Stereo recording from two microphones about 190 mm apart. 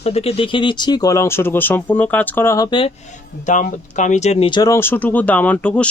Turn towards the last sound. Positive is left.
turn(degrees=5)  # may be behind; listen again after turning